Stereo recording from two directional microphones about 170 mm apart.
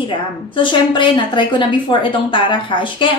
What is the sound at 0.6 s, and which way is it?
A woman's voice, 30° left (ahead or behind).